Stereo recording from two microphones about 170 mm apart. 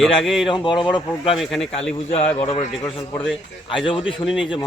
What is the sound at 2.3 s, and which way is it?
Speech, 35° left (ahead or behind).